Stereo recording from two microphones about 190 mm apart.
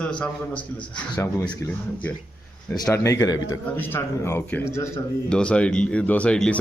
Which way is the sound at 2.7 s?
15° left (ahead or behind).